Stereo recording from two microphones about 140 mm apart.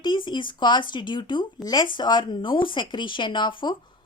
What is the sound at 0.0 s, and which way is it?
A woman's voice, 35° left (ahead or behind).